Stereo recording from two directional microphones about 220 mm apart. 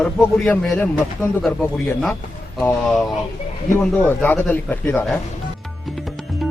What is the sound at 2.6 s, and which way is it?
Speech, 5° left (ahead or behind).